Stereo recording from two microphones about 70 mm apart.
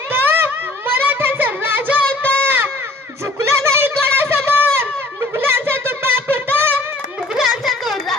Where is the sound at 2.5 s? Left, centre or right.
Right.